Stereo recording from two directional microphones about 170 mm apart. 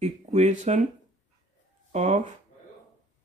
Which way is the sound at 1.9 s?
45° right (ahead or behind).